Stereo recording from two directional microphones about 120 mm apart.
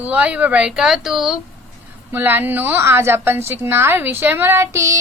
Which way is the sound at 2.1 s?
15° right (ahead or behind).